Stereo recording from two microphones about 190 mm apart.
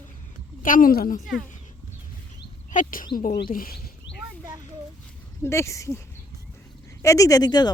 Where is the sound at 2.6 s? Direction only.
45° left (ahead or behind).